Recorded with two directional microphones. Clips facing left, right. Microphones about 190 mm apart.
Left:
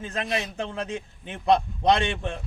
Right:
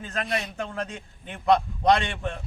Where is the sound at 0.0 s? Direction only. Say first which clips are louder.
Left 1 dB; 20° left (ahead or behind).